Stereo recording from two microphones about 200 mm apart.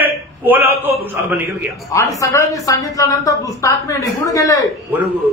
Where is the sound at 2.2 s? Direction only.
15° left (ahead or behind).